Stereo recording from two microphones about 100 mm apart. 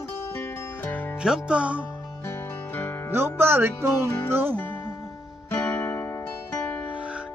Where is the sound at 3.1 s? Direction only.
25° right (ahead or behind).